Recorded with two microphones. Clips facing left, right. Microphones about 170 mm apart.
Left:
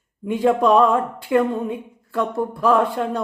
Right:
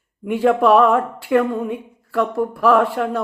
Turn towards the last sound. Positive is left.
turn(degrees=25)  # may be behind; listen again after turning